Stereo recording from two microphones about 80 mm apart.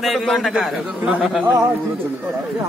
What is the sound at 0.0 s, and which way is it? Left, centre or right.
A man's voice, centre.